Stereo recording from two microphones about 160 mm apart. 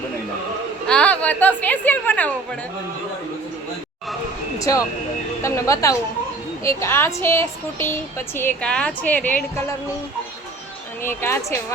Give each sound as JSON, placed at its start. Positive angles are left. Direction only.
{"t": 0.9, "sound": "a woman's voice", "side_deg": 5}
{"t": 4.7, "sound": "a woman's voice", "side_deg": 20}
{"t": 11.0, "sound": "speech", "side_deg": 15}